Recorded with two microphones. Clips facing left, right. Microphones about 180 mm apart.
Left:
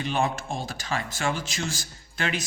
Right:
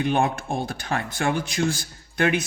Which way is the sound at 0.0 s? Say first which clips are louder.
Right 4 dB; 55° right (ahead or behind).